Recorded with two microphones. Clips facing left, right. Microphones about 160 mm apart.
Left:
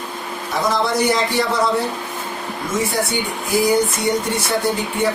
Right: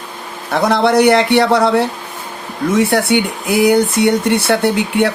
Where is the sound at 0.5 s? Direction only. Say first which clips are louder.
Right 7 dB; 70° right (ahead or behind).